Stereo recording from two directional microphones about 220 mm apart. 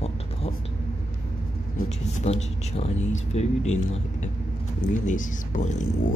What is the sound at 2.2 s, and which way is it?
Speech, 30° left (ahead or behind).